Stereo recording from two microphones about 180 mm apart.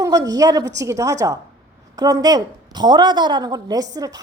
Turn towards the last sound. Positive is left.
turn(degrees=-20)  # may be behind; listen again after turning